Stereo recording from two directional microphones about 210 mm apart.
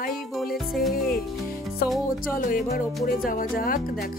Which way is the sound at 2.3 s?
40° left (ahead or behind).